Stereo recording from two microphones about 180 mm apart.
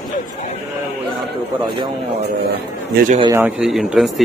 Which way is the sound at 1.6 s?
25° right (ahead or behind).